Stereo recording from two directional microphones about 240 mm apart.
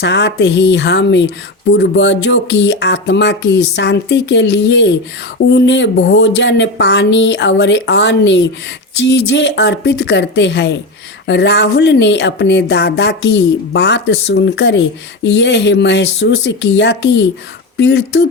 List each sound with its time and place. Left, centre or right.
0.0 s speech: left